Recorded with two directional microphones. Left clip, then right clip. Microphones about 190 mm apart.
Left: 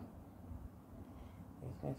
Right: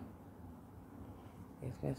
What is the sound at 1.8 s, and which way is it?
Speech, 25° right (ahead or behind).